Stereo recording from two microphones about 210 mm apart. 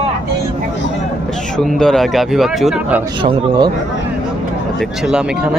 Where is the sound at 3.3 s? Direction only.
20° right (ahead or behind).